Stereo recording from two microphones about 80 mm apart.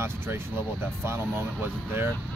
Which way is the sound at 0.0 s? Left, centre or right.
Right.